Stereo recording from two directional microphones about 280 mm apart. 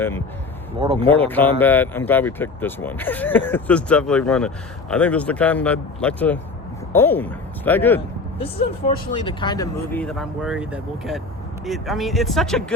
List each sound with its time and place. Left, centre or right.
0.8 s speech: centre
1.2 s speech: centre
9.1 s speech: centre